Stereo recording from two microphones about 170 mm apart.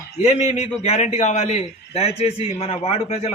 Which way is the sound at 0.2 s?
40° left (ahead or behind).